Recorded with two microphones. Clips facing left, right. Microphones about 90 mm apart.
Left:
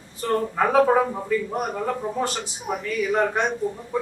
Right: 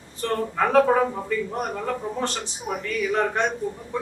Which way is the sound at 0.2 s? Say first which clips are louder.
Left 2 dB; 10° left (ahead or behind).